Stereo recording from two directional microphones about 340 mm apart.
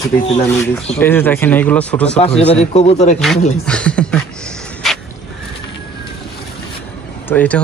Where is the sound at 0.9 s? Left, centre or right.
Centre.